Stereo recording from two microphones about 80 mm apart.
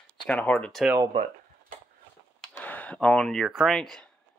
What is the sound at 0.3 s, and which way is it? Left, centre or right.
Speech, centre.